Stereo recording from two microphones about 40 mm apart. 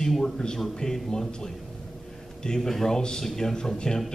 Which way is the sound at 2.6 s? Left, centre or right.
Centre.